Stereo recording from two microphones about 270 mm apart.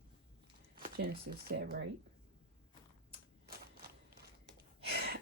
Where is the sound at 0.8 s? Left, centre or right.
Right.